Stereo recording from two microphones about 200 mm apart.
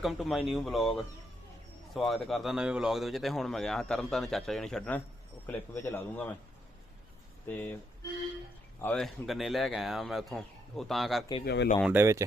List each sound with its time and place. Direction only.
0.0 s speech: centre (ahead or behind)
7.4 s speech: 10° left (ahead or behind)
8.8 s speech: 5° left (ahead or behind)
11.4 s speech: 60° left (ahead or behind)
11.9 s speech: 15° right (ahead or behind)